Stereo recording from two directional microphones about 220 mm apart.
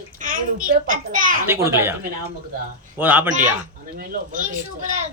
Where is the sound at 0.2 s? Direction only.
35° right (ahead or behind).